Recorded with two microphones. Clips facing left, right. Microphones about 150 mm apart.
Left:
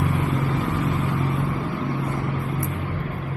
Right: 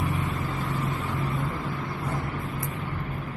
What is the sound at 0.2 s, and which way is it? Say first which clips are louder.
Vehicle: left 6 dB; 80° left.